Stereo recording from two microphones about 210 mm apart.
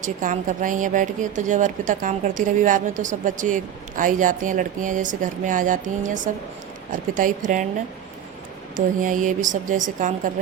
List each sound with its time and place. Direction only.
0.0 s speech: 40° right (ahead or behind)
8.7 s speech: 40° right (ahead or behind)